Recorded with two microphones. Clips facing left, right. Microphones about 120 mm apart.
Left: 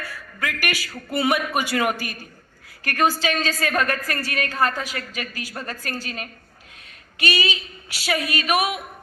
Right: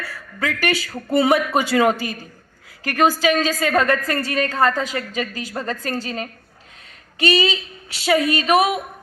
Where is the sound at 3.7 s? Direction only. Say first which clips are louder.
Right 5 dB; 25° right (ahead or behind).